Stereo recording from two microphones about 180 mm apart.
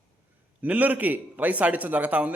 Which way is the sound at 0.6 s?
10° right (ahead or behind).